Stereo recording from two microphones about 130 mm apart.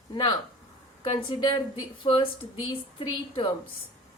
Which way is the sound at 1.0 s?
40° left (ahead or behind).